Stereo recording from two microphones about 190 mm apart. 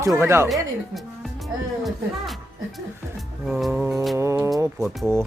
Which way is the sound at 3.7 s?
15° right (ahead or behind).